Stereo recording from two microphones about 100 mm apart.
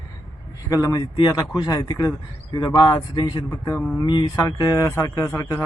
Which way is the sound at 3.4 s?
35° left (ahead or behind).